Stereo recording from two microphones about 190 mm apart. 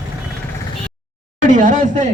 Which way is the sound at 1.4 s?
45° right (ahead or behind).